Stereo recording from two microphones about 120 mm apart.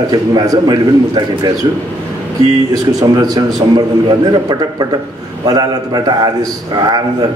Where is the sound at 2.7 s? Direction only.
30° right (ahead or behind).